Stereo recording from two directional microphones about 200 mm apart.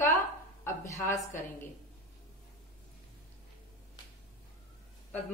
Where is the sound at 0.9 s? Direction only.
15° left (ahead or behind).